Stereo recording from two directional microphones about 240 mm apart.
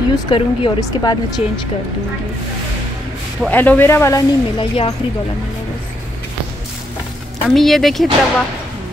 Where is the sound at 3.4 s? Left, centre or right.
Centre.